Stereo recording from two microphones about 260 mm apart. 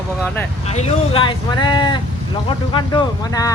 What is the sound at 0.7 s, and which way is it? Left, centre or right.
Speech, left.